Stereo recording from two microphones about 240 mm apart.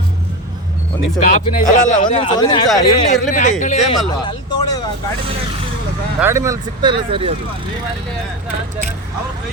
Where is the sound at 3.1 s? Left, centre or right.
Left.